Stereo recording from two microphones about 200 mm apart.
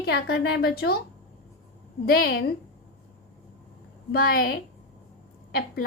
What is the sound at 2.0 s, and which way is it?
Speech, 50° left (ahead or behind).